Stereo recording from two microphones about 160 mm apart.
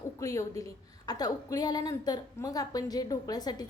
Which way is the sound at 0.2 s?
20° left (ahead or behind).